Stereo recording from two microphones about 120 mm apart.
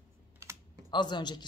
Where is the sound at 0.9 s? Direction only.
40° left (ahead or behind).